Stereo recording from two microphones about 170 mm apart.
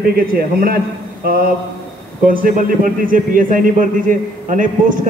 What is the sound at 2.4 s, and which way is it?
A man's voice, 55° right (ahead or behind).